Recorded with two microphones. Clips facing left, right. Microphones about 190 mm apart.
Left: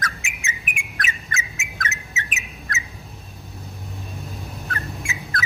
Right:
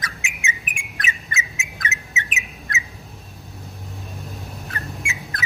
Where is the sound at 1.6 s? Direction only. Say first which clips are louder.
Even; 20° right (ahead or behind).